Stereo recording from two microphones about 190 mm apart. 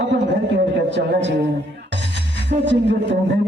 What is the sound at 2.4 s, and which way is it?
Speech, 70° right (ahead or behind).